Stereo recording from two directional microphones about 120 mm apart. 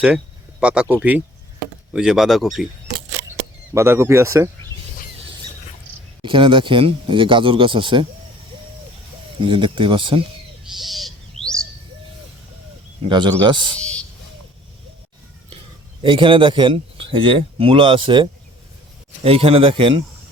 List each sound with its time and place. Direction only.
0.6 s speech: 10° right (ahead or behind)
3.8 s speech: 20° right (ahead or behind)
6.2 s a man's voice: 45° right (ahead or behind)
9.4 s a man's voice: 45° right (ahead or behind)
10.8 s bird: centre (ahead or behind)
13.1 s speech: 40° right (ahead or behind)
13.7 s a sound: 10° left (ahead or behind)
16.0 s a man's voice: 45° right (ahead or behind)